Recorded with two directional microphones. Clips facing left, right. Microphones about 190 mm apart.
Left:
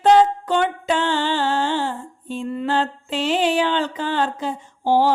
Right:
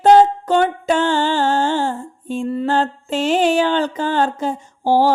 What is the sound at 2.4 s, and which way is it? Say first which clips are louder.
Mantra: right 3 dB; 40° right (ahead or behind).